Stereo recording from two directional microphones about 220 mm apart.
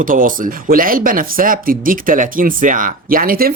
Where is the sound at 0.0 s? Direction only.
40° right (ahead or behind).